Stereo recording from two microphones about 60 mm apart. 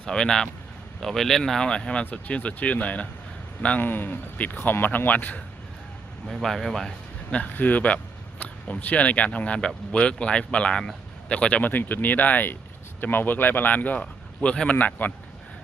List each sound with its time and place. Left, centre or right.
0.0 s speech: centre; by 5.4 s left
6.2 s a man's voice: centre
7.3 s speech: left